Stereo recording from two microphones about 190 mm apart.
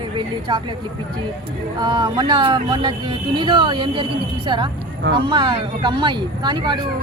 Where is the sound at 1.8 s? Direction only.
25° right (ahead or behind).